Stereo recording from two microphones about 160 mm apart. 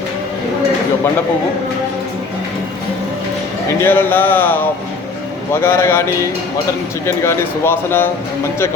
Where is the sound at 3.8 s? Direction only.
15° left (ahead or behind).